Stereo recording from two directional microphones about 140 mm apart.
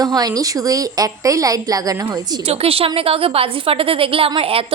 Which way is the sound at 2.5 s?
45° right (ahead or behind).